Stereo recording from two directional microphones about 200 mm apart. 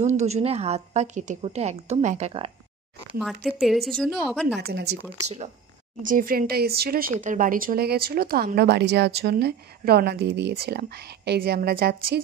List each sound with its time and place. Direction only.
0.0 s a woman's voice: 35° right (ahead or behind)
3.1 s a woman's voice: centre (ahead or behind)
4.6 s speech: 55° right (ahead or behind)
6.0 s speech: 45° right (ahead or behind)